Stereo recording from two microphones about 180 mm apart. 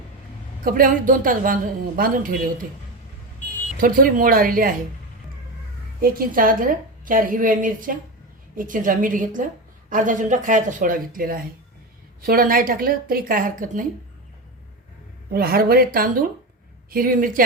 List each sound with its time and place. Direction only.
0.6 s a woman's voice: 50° right (ahead or behind)
3.8 s a woman's voice: 50° right (ahead or behind)
6.0 s a woman's voice: 50° right (ahead or behind)
15.3 s a woman's voice: 55° right (ahead or behind)